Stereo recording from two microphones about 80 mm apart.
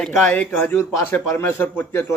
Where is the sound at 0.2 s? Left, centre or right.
Left.